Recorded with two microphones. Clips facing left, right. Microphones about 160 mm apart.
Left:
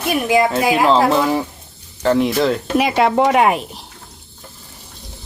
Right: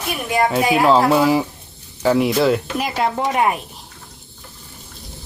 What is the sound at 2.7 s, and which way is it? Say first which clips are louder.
Speech: left 6 dB; 85° left.